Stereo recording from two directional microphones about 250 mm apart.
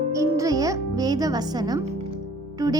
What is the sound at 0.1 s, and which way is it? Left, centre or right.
Music, centre.